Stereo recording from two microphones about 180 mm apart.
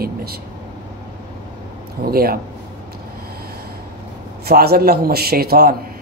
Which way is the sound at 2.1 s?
55° right (ahead or behind).